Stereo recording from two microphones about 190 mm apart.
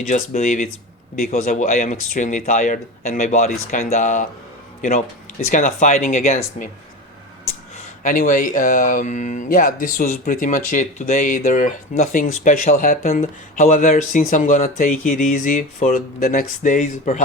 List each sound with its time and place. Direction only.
0.1 s speech: 40° left (ahead or behind)
8.0 s speech: 45° left (ahead or behind)